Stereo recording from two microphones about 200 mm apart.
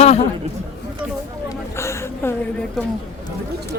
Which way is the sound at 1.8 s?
15° left (ahead or behind).